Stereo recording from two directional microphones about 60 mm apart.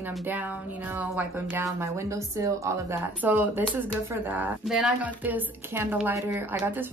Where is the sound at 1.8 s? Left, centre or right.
Right.